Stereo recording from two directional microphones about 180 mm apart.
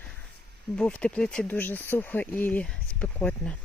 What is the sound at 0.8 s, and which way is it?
Speech, 5° left (ahead or behind).